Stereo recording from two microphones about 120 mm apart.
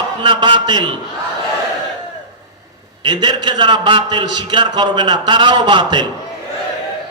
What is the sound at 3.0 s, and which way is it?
A man's voice, 40° right (ahead or behind).